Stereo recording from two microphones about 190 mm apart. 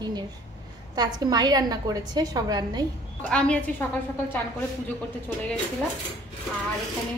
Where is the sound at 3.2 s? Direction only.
5° left (ahead or behind).